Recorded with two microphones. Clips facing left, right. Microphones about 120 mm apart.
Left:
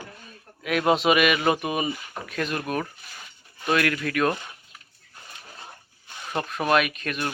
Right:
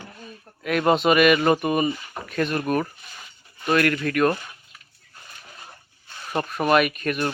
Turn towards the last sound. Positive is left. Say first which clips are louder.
# right 5 dB
turn(degrees=-5)  # may be behind; listen again after turning